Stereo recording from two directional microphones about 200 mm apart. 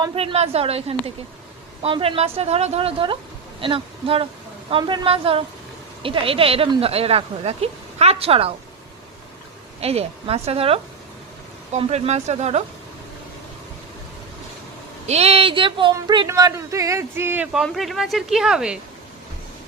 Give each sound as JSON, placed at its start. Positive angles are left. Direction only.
{"t": 0.0, "sound": "a woman's voice", "side_deg": -30}
{"t": 9.8, "sound": "a woman's voice", "side_deg": -30}
{"t": 15.0, "sound": "speech", "side_deg": -30}